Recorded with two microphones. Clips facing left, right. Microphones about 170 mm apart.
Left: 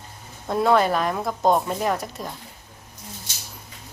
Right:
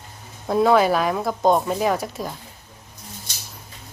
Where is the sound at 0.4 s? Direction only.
5° right (ahead or behind).